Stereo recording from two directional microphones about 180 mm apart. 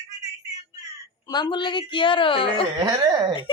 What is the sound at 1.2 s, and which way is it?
A woman's voice, 25° left (ahead or behind).